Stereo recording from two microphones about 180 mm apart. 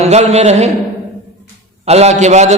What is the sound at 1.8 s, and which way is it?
Speech, 35° right (ahead or behind).